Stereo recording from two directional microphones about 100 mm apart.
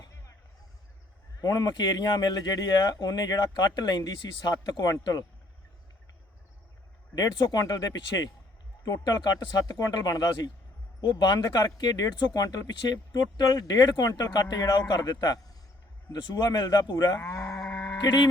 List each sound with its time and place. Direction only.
0.0 s a sound: 35° left (ahead or behind)
1.4 s speech: 40° left (ahead or behind)
7.2 s speech: 40° left (ahead or behind)
17.9 s speech: 45° left (ahead or behind)